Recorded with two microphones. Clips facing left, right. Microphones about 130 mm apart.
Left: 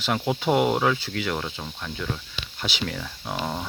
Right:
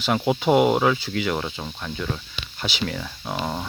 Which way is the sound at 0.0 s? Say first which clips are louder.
Right 3 dB; 5° right (ahead or behind).